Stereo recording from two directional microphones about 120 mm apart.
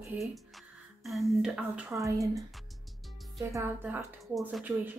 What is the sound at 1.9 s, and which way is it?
Speech, 25° right (ahead or behind).